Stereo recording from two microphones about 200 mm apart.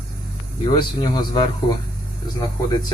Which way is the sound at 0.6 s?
20° left (ahead or behind).